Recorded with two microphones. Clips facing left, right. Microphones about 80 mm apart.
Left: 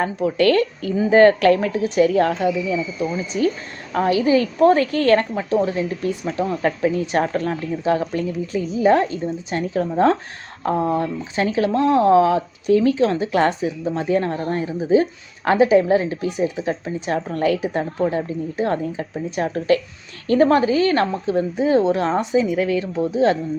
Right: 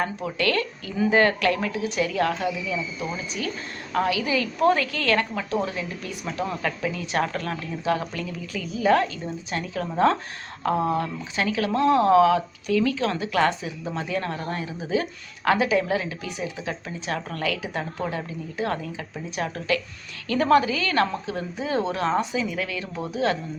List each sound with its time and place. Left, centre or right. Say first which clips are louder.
0.0 s speech: left 8 dB; left